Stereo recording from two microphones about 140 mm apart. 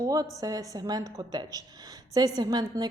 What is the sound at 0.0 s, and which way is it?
A woman's voice, 25° right (ahead or behind).